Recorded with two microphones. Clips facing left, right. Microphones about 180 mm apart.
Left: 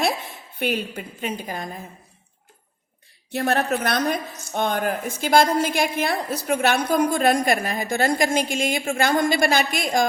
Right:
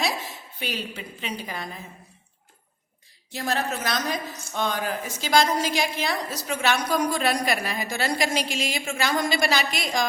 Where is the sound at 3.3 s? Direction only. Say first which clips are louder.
Left 6 dB; 60° left (ahead or behind).